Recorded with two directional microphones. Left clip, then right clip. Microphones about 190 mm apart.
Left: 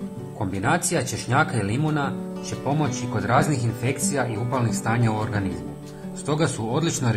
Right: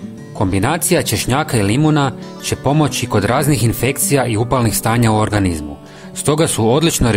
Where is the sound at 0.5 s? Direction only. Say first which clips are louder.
Right 6 dB; 55° right (ahead or behind).